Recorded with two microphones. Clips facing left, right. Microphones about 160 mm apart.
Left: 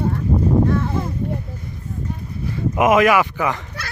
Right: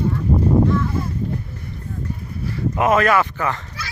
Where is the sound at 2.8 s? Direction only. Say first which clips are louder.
Left 2 dB; 15° left (ahead or behind).